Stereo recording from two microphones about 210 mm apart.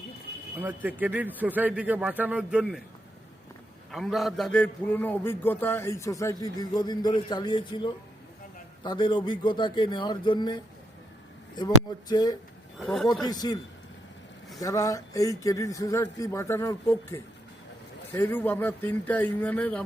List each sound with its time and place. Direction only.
0.6 s a man's voice: 10° right (ahead or behind)
3.9 s a man's voice: centre (ahead or behind); by 12.4 s 20° left (ahead or behind)
12.8 s speech: centre (ahead or behind)
13.2 s speech: 20° left (ahead or behind)
14.6 s a man's voice: 15° left (ahead or behind)